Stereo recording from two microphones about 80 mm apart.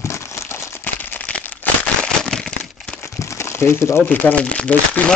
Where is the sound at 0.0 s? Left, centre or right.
Left.